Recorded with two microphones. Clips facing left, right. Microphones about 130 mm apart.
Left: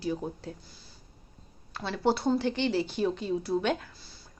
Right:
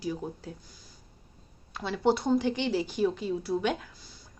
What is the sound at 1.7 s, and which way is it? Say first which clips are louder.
Speech: right 1 dB; 15° right (ahead or behind).